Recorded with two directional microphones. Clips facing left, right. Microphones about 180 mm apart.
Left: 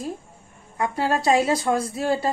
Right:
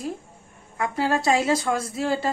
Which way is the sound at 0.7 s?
30° left (ahead or behind).